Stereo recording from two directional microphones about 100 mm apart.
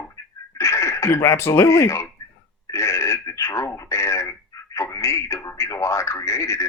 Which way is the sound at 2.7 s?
30° left (ahead or behind).